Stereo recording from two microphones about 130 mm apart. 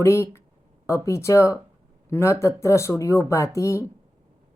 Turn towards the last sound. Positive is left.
turn(degrees=25)  # may be behind; listen again after turning